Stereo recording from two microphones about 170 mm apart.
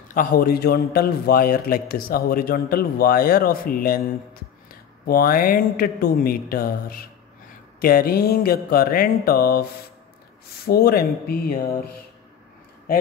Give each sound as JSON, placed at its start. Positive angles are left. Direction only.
{"t": 0.1, "sound": "a man's voice", "side_deg": 55}